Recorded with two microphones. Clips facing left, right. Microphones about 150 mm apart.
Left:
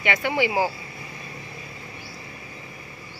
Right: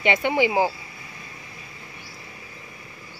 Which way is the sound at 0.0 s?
25° right (ahead or behind).